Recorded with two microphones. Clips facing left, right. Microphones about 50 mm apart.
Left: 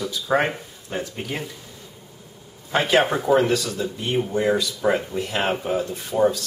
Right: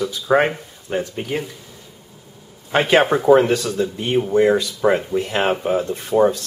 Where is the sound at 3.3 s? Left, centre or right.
Right.